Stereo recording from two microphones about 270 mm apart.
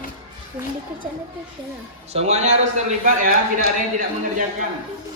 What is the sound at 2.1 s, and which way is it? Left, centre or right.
A man's voice, right.